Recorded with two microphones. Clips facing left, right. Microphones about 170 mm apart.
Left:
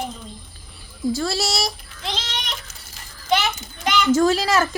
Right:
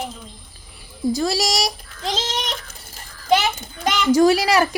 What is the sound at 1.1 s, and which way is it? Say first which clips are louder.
Speech: right 5 dB; 15° right (ahead or behind).